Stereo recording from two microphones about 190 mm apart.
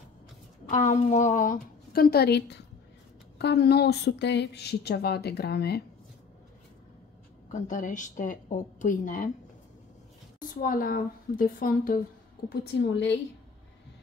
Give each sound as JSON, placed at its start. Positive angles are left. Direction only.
{"t": 0.7, "sound": "a woman's voice", "side_deg": 40}
{"t": 7.4, "sound": "a woman's voice", "side_deg": 40}
{"t": 10.5, "sound": "a woman's voice", "side_deg": 45}
{"t": 12.7, "sound": "a woman's voice", "side_deg": 65}